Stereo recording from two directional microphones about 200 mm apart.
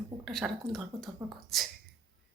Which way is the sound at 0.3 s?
Centre (ahead or behind).